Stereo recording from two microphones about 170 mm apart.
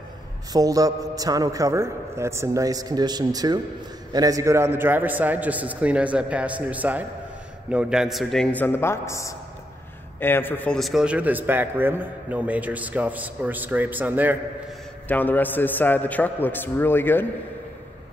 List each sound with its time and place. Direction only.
0.5 s a man's voice: 20° right (ahead or behind)
15.0 s a man's voice: 10° left (ahead or behind)